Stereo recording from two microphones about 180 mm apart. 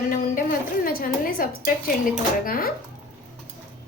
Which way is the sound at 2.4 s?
55° left (ahead or behind).